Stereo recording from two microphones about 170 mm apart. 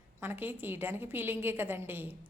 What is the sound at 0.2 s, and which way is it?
A woman's voice, 10° right (ahead or behind).